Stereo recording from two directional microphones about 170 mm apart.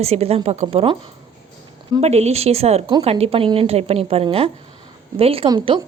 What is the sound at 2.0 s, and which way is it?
Speech, 40° right (ahead or behind).